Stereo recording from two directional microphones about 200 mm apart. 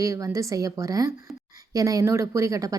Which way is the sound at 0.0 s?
15° right (ahead or behind).